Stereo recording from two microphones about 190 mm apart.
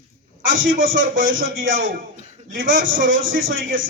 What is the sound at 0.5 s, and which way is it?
A man's voice, 50° right (ahead or behind).